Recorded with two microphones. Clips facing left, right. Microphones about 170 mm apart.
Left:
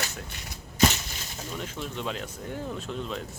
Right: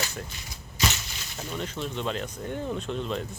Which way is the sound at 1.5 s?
5° left (ahead or behind).